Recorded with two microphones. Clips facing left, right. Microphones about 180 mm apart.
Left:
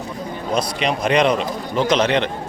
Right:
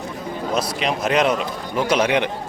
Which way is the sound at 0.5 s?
5° right (ahead or behind).